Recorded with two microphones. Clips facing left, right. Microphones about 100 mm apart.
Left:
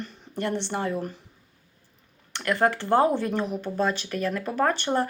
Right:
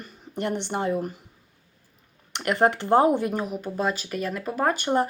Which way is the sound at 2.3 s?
20° right (ahead or behind).